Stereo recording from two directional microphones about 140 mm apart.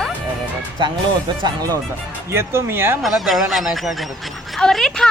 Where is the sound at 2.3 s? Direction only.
20° right (ahead or behind).